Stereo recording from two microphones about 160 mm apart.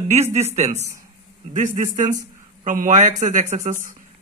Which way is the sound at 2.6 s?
50° right (ahead or behind).